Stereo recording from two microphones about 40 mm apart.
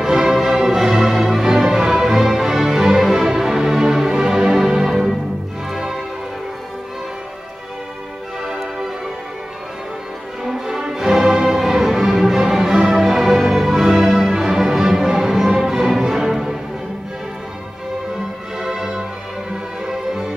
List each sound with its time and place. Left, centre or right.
0.0 s music: centre
8.5 s music: centre
10.4 s music: centre
18.6 s music: centre